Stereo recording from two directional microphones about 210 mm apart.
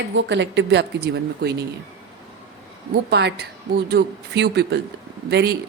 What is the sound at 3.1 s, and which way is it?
Speech, 55° right (ahead or behind).